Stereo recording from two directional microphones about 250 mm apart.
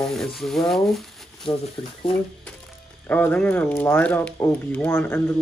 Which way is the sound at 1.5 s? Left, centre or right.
Left.